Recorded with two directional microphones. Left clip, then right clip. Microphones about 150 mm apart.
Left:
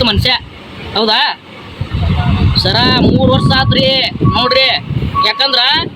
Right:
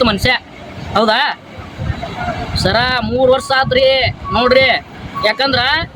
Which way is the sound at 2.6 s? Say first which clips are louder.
Left 3 dB; 10° right (ahead or behind).